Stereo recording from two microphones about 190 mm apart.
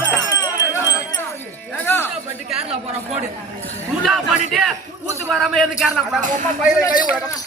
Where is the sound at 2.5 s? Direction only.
5° right (ahead or behind).